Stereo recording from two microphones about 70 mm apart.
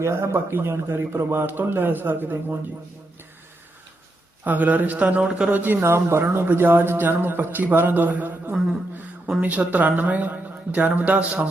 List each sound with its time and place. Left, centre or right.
0.0 s a man's voice: right
4.4 s speech: right
5.8 s a man's voice: right; by 11.3 s centre